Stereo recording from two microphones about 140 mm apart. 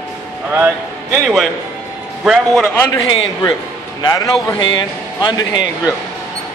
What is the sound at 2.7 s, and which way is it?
Speech, 20° left (ahead or behind).